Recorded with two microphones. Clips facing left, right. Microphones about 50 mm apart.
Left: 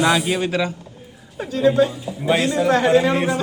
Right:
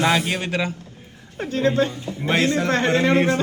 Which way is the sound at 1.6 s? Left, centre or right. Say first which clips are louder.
Left 4 dB; centre.